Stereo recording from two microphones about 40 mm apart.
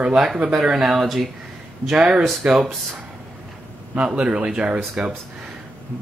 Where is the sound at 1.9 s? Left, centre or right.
Right.